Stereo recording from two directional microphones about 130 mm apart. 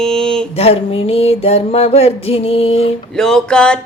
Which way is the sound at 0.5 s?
50° left (ahead or behind).